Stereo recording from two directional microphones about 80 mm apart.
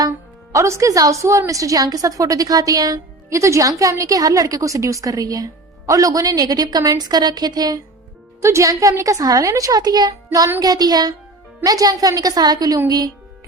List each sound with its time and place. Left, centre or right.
0.5 s a woman's voice: right
8.4 s a woman's voice: right